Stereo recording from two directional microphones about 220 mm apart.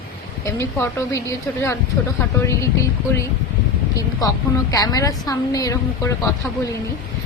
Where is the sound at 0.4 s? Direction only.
15° left (ahead or behind).